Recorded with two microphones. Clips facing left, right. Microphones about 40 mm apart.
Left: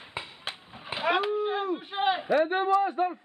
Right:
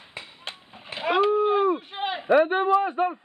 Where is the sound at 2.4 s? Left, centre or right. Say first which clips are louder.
Right 3 dB; right.